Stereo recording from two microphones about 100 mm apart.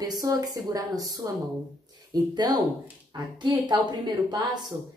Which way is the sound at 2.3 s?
40° right (ahead or behind).